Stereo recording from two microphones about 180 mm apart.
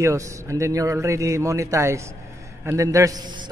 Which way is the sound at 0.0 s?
15° right (ahead or behind).